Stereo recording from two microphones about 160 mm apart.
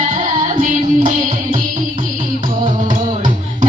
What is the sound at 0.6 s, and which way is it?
Music, 55° right (ahead or behind).